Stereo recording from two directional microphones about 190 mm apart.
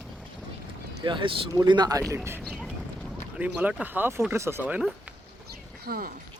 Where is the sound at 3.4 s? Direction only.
5° right (ahead or behind).